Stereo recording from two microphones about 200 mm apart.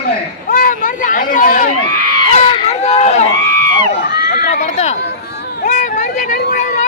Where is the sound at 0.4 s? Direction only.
45° left (ahead or behind).